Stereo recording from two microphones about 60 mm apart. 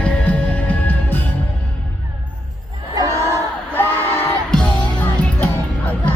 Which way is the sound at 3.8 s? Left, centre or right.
Left.